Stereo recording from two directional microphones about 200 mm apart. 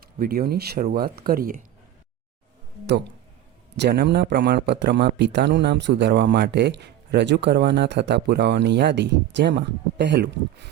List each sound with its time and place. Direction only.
0.0 s speech: 50° right (ahead or behind)
3.8 s a man's voice: 55° right (ahead or behind)